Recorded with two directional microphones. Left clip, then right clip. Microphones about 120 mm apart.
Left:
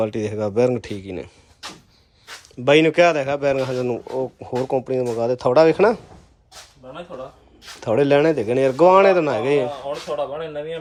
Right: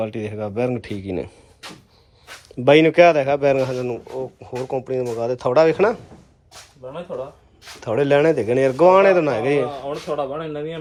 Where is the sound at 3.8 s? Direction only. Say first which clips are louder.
Left 3 dB; 45° left (ahead or behind).